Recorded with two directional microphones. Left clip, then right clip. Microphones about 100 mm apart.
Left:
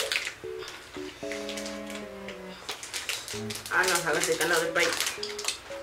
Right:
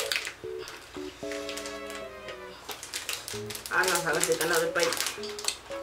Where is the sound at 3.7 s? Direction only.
10° left (ahead or behind).